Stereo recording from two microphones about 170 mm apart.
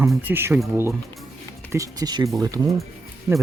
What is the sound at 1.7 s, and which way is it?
Speech, 20° right (ahead or behind).